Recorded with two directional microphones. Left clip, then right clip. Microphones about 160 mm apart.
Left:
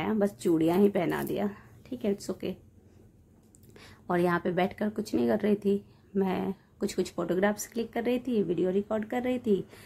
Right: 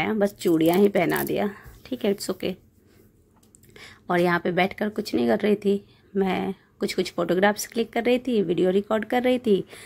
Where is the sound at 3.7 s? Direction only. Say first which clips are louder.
Right 6 dB; 15° right (ahead or behind).